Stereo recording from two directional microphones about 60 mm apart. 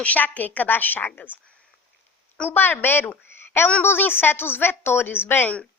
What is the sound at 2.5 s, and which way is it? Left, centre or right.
A woman's voice, left.